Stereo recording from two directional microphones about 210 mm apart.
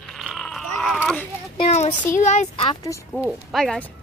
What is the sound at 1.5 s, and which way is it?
Speech, 30° left (ahead or behind).